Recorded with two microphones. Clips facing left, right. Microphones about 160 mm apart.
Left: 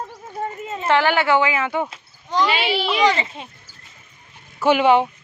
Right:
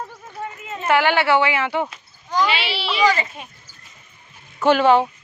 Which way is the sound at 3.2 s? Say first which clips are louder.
Even; 25° left (ahead or behind).